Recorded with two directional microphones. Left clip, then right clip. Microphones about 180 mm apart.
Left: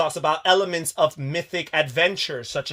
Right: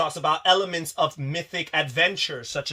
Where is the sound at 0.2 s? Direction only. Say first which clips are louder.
Even; 55° left (ahead or behind).